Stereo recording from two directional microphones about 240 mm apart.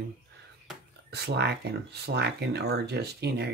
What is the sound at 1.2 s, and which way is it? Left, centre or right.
Speech, right.